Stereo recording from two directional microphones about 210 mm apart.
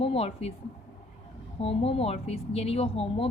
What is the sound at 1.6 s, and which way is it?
A woman's voice, 30° left (ahead or behind).